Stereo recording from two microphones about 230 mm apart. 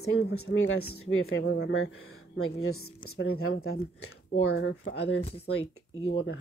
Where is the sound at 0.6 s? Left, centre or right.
Left.